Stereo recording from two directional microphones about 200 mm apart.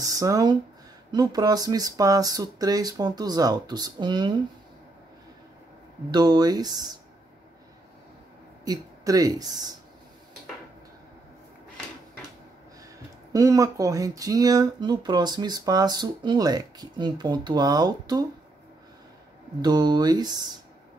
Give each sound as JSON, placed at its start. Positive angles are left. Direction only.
{"t": 0.0, "sound": "speech", "side_deg": -15}
{"t": 6.1, "sound": "speech", "side_deg": -20}
{"t": 8.6, "sound": "speech", "side_deg": -15}
{"t": 13.3, "sound": "speech", "side_deg": -15}
{"t": 19.6, "sound": "speech", "side_deg": -20}